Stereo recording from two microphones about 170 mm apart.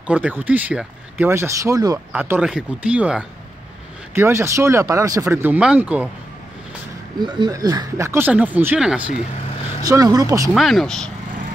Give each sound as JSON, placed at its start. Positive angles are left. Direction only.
{"t": 0.0, "sound": "speech", "side_deg": -10}
{"t": 2.1, "sound": "speech", "side_deg": -10}
{"t": 7.2, "sound": "speech", "side_deg": -25}
{"t": 9.8, "sound": "speech", "side_deg": -20}
{"t": 10.5, "sound": "speech", "side_deg": 0}